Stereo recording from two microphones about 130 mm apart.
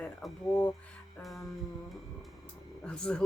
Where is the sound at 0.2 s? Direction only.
Centre (ahead or behind).